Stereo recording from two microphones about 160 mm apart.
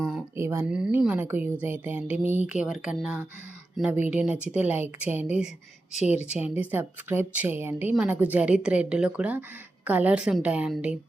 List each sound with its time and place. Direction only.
0.3 s a woman's voice: 15° right (ahead or behind)
6.0 s speech: 45° left (ahead or behind)
6.2 s a woman's voice: 10° right (ahead or behind)